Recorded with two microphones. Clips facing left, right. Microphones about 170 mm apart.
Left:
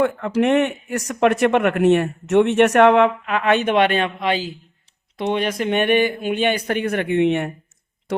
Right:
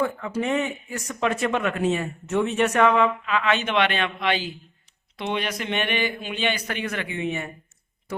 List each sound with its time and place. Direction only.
0.0 s speech: 85° left